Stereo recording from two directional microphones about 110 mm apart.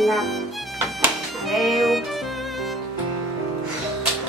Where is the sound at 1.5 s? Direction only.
Centre (ahead or behind).